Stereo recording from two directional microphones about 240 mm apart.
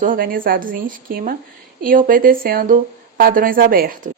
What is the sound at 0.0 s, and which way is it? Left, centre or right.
A woman's voice, right.